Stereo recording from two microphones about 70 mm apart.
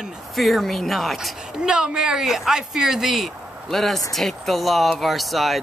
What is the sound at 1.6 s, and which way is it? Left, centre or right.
A woman's voice, centre.